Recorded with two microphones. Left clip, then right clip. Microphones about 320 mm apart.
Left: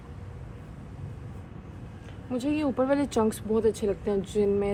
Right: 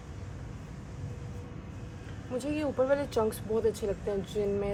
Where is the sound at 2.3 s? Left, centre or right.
Left.